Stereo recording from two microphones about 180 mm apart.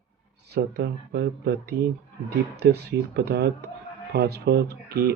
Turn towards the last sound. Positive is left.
turn(degrees=-65)  # may be behind; listen again after turning